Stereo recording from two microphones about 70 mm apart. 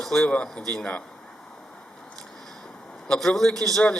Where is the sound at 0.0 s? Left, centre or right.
Centre.